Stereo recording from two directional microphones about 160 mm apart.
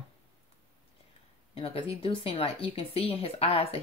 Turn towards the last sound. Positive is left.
turn(degrees=40)  # may be behind; listen again after turning